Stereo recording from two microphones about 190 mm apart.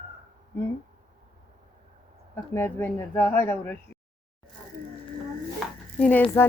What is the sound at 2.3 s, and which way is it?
Speech, 10° left (ahead or behind).